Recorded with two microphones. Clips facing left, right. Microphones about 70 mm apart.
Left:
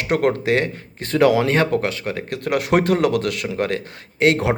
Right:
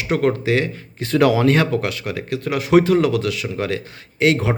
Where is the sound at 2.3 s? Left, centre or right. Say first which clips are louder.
Right 3 dB; left.